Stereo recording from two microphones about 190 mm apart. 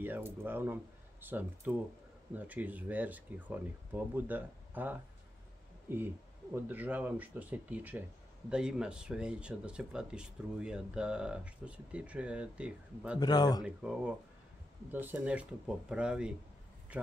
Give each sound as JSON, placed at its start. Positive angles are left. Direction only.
{"t": 0.0, "sound": "speech", "side_deg": -10}
{"t": 6.5, "sound": "speech", "side_deg": -10}
{"t": 13.2, "sound": "speech", "side_deg": 20}
{"t": 13.7, "sound": "speech", "side_deg": -5}